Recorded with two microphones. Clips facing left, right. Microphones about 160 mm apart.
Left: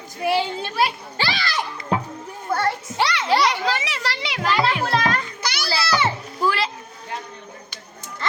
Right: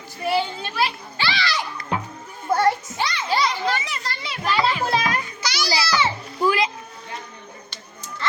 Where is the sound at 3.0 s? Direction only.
75° left (ahead or behind).